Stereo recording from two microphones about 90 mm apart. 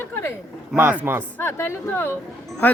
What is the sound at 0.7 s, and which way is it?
Speech, 25° right (ahead or behind).